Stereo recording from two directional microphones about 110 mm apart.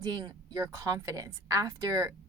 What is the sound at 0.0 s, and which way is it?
Speech, 35° right (ahead or behind).